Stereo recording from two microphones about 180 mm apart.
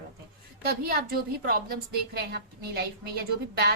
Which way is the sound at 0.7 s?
55° right (ahead or behind).